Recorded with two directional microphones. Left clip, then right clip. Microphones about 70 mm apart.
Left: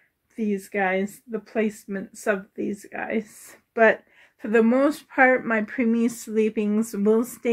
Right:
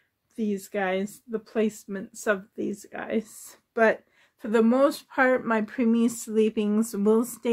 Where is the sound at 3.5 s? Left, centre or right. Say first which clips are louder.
Left 4 dB; right.